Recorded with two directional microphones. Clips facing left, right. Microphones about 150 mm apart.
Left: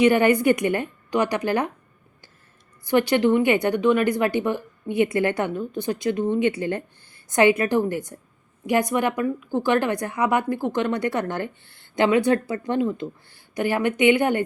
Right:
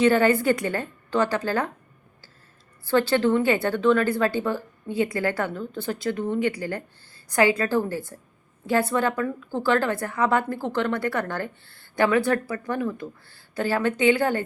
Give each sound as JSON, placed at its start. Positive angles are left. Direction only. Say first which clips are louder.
{"t": 0.0, "sound": "a woman's voice", "louder": "left 2 dB", "side_deg": 15}
{"t": 2.8, "sound": "a woman's voice", "louder": "left 2 dB", "side_deg": 15}